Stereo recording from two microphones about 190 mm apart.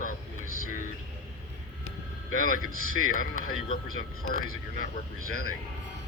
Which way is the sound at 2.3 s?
45° left (ahead or behind).